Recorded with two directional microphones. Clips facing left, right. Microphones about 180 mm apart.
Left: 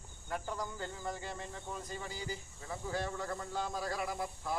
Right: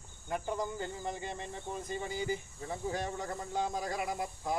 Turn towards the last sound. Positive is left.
turn(degrees=-20)  # may be behind; listen again after turning